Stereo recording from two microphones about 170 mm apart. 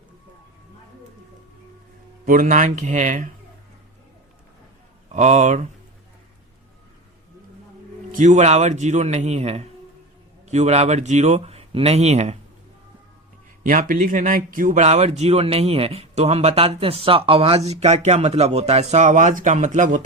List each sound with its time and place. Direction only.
2.2 s speech: 50° right (ahead or behind)
5.1 s speech: 45° right (ahead or behind)
8.1 s speech: 45° right (ahead or behind)
13.7 s speech: 50° right (ahead or behind)